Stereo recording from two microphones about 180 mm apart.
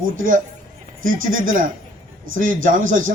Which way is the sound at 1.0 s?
50° right (ahead or behind).